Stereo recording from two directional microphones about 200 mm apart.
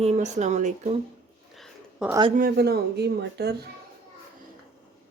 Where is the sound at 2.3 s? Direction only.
50° right (ahead or behind).